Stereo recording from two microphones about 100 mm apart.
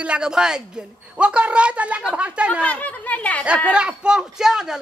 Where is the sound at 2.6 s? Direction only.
15° left (ahead or behind).